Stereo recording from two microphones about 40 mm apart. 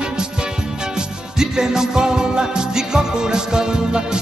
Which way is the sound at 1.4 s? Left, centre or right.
Centre.